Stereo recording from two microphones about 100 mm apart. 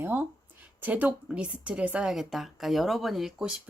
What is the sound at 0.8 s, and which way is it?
Speech, 15° right (ahead or behind).